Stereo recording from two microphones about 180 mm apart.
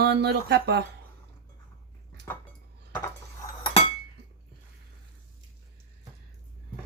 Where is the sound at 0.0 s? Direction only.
65° right (ahead or behind).